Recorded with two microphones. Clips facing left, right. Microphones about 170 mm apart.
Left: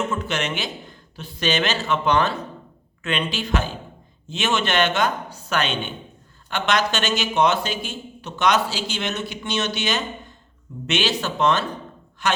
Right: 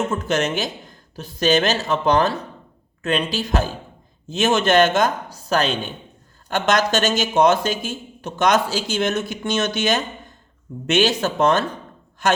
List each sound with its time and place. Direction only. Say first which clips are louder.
0.2 s a man's voice: right 5 dB; 45° right (ahead or behind)